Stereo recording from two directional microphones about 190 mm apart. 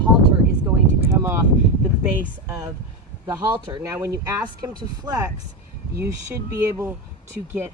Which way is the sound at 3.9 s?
15° right (ahead or behind).